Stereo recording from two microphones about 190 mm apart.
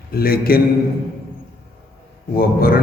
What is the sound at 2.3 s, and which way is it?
Speech, 50° left (ahead or behind).